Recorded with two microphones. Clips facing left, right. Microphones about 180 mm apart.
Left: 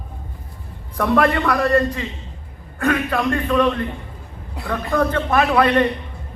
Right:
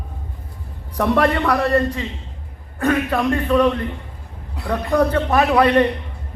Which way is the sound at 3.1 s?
10° right (ahead or behind).